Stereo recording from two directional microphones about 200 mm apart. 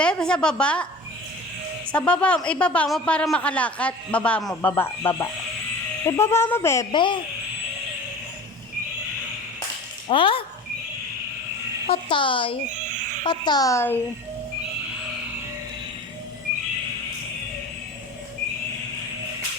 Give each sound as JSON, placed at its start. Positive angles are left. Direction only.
{"t": 0.0, "sound": "speech", "side_deg": 5}
{"t": 1.9, "sound": "speech", "side_deg": 5}
{"t": 10.1, "sound": "a woman's voice", "side_deg": 25}
{"t": 11.9, "sound": "a woman's voice", "side_deg": 25}